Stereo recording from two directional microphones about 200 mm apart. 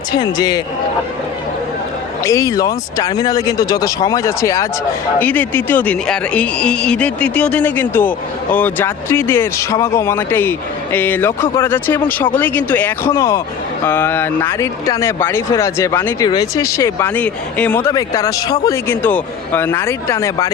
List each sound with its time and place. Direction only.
0.1 s a man's voice: 20° left (ahead or behind)
2.2 s speech: 15° left (ahead or behind)